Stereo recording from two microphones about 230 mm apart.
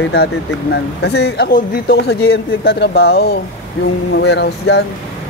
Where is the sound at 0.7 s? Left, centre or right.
Left.